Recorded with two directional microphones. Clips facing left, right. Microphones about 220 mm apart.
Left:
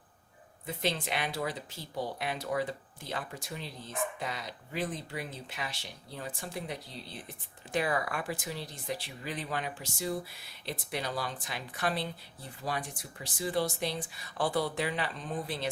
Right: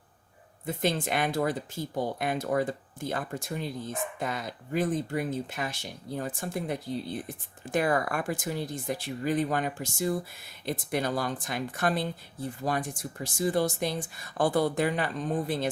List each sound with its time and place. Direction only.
0.6 s speech: 50° right (ahead or behind)